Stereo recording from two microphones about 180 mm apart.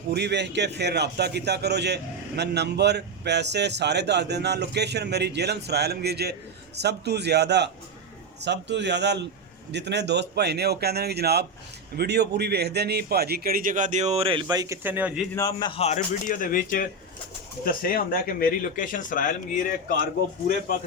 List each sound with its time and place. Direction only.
0.1 s a man's voice: 70° right (ahead or behind); by 15.2 s 10° right (ahead or behind)
15.4 s a man's voice: 20° left (ahead or behind)
15.8 s speech: 45° left (ahead or behind)